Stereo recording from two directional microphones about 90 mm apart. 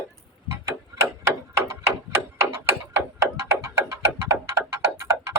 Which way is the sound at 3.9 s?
30° right (ahead or behind).